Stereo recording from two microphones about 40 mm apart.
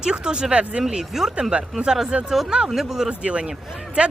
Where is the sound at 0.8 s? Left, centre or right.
Centre.